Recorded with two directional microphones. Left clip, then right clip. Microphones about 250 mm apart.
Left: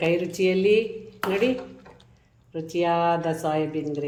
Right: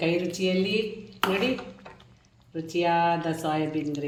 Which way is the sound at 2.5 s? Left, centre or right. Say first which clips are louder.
Left 1 dB; centre.